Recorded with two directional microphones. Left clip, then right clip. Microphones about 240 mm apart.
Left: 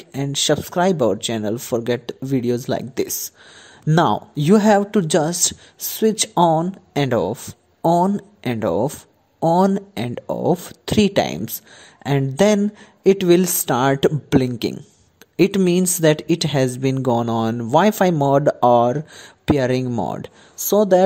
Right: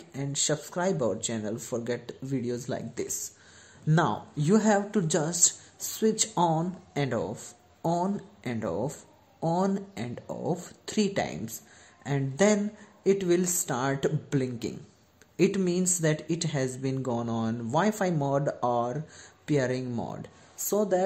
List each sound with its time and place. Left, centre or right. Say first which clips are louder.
0.1 s a woman's voice: left 11 dB; left